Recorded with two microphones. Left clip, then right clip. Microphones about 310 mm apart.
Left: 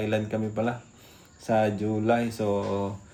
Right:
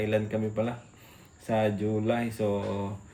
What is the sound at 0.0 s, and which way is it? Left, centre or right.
Speech, centre.